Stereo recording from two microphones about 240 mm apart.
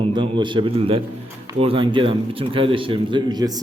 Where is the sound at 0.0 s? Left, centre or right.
Centre.